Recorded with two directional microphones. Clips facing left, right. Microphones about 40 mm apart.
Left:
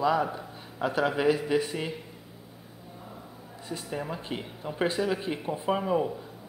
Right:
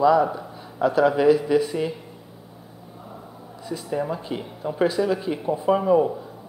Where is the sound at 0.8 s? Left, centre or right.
Centre.